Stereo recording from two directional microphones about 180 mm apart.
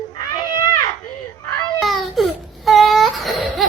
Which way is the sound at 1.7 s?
Centre (ahead or behind).